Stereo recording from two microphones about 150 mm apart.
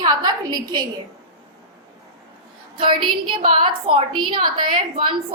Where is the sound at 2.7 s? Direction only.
35° right (ahead or behind).